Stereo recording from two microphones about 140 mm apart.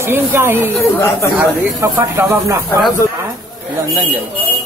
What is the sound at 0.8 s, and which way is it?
Speech, 20° left (ahead or behind).